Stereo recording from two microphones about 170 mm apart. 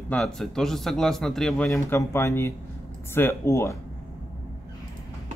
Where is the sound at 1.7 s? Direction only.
15° left (ahead or behind).